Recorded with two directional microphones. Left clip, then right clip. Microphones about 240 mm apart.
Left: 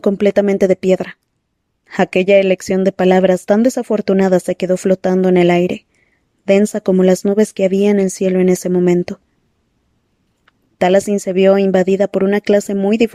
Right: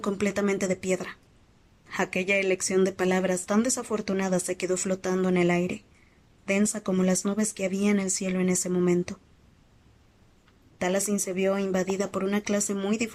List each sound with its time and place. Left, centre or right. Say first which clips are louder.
0.0 s speech: left 14 dB; left
10.8 s speech: left 15 dB; left